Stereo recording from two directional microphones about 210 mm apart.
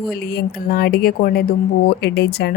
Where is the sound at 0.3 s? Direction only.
45° left (ahead or behind).